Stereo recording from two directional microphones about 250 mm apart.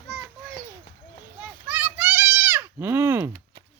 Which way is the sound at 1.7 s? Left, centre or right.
Centre.